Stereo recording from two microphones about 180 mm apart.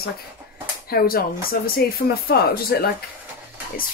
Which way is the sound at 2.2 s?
60° left (ahead or behind).